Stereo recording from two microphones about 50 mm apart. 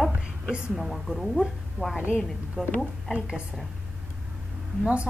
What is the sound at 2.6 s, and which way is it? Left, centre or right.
Speech, centre.